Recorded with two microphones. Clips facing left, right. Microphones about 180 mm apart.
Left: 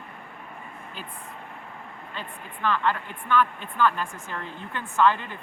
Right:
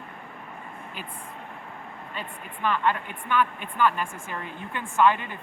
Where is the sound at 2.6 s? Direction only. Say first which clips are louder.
Even; 15° right (ahead or behind).